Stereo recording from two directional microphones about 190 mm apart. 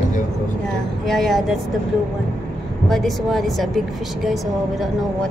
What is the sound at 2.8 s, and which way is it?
Speech, centre (ahead or behind).